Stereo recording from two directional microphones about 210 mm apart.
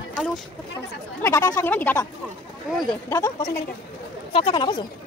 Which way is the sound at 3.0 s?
15° left (ahead or behind).